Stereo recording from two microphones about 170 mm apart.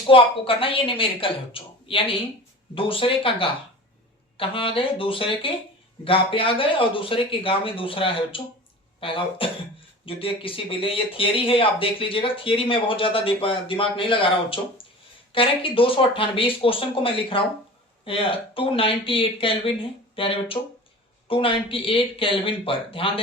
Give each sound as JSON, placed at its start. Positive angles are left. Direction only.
{"t": 0.1, "sound": "speech", "side_deg": 30}